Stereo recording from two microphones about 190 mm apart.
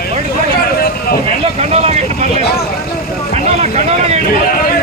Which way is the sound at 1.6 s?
35° right (ahead or behind).